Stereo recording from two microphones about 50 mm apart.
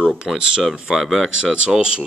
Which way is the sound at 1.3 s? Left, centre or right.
Centre.